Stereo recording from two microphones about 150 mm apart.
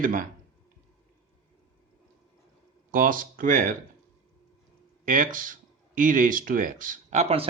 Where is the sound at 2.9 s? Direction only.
65° right (ahead or behind).